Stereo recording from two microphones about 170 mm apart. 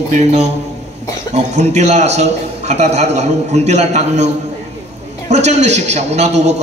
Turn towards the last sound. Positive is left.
turn(degrees=-40)  # may be behind; listen again after turning